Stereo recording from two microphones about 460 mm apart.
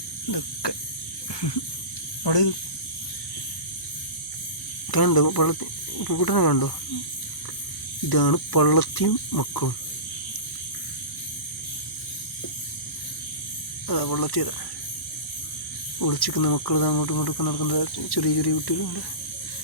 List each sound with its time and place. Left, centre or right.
0.3 s cricket: left
2.2 s speech: left
4.9 s speech: left
8.1 s speech: left
13.8 s speech: left
16.0 s speech: left